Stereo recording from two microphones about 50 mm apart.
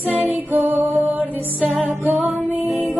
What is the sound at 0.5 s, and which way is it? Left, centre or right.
Music, right.